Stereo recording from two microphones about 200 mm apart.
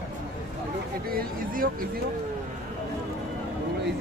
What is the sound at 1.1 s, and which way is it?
Speech, 45° right (ahead or behind).